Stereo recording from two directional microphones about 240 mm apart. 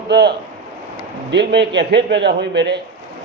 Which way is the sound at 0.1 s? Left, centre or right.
Right.